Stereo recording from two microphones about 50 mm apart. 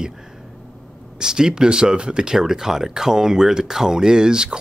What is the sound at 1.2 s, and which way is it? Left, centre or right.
Speech, centre.